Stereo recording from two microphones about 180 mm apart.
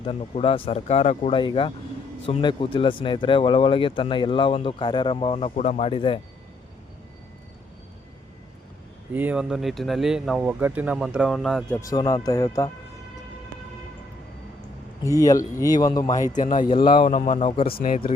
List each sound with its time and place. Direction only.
0.0 s speech: 30° left (ahead or behind)
9.1 s speech: 5° right (ahead or behind)
11.8 s speech: 20° left (ahead or behind)
15.0 s speech: 20° left (ahead or behind)
16.3 s speech: 45° left (ahead or behind)
16.8 s speech: 30° left (ahead or behind)
17.1 s speech: 40° left (ahead or behind)
17.7 s speech: 50° left (ahead or behind)